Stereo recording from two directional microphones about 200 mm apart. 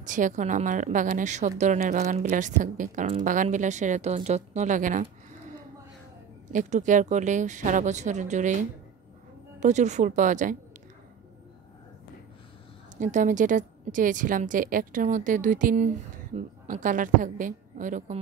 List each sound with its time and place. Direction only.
0.0 s a woman's voice: 40° right (ahead or behind)
6.5 s a woman's voice: 35° right (ahead or behind)
9.6 s a woman's voice: 35° right (ahead or behind)
12.9 s a woman's voice: 40° right (ahead or behind)